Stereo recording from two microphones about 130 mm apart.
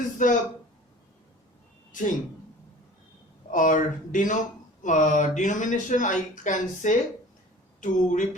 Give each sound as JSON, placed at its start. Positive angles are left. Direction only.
{"t": 0.2, "sound": "speech", "side_deg": 80}
{"t": 1.9, "sound": "speech", "side_deg": 80}
{"t": 3.5, "sound": "speech", "side_deg": 90}